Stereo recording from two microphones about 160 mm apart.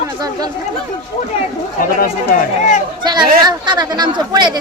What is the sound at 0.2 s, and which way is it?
Speech, 25° right (ahead or behind).